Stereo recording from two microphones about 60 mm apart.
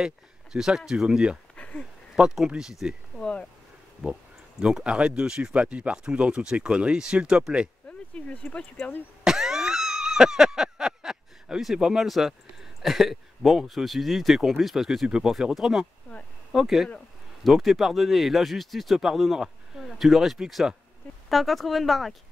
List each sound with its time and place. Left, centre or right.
0.0 s speech: centre
1.6 s a sound: centre
2.1 s speech: centre
3.2 s speech: centre
4.0 s speech: centre
8.3 s speech: centre
9.2 s a sound: centre
12.8 s speech: centre